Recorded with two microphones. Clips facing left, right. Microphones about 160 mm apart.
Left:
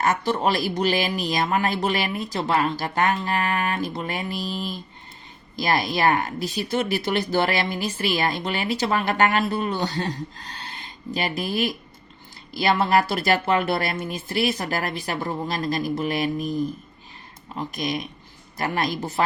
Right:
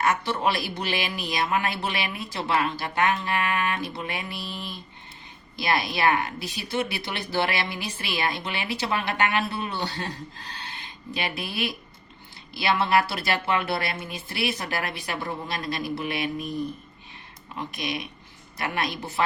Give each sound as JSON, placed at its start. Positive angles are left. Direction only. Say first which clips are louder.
{"t": 0.0, "sound": "speech", "louder": "left 2 dB", "side_deg": 40}
{"t": 11.1, "sound": "speech", "louder": "left 5 dB", "side_deg": 40}
{"t": 17.5, "sound": "speech", "louder": "left 4 dB", "side_deg": 40}